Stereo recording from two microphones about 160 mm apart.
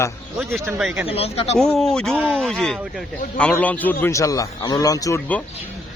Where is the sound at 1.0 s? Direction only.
40° left (ahead or behind).